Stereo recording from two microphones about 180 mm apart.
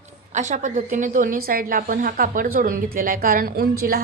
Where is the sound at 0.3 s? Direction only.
40° right (ahead or behind).